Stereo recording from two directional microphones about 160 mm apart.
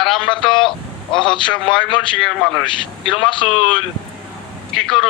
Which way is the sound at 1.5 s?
5° left (ahead or behind).